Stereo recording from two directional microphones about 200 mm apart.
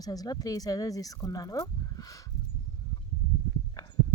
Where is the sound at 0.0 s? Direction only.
20° left (ahead or behind).